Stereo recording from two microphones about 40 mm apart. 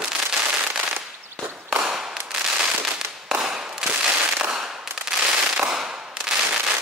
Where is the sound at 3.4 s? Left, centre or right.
Centre.